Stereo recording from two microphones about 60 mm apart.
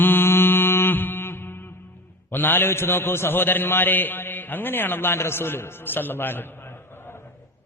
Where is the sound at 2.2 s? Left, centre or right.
Left.